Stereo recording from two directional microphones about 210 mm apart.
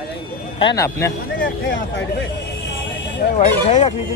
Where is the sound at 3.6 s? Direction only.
30° left (ahead or behind).